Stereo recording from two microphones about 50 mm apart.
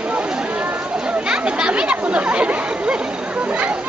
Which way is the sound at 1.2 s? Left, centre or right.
Centre.